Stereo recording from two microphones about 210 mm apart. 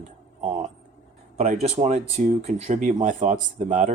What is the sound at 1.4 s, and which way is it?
Speech, 35° right (ahead or behind).